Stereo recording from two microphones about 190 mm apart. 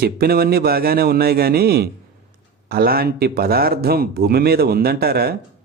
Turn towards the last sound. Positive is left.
turn(degrees=-55)  # may be behind; listen again after turning